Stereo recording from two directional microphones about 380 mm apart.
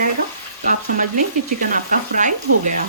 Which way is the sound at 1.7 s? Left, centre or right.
Centre.